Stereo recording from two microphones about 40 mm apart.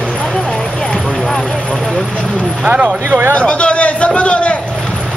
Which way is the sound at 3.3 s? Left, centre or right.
Left.